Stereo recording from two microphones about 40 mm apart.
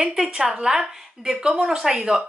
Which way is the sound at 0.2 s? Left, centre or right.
Right.